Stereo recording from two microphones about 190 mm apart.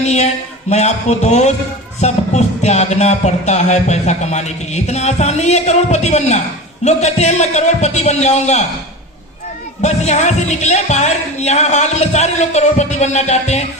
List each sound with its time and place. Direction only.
0.0 s speech: 35° left (ahead or behind)
0.7 s music: 35° left (ahead or behind)
9.8 s music: 35° left (ahead or behind)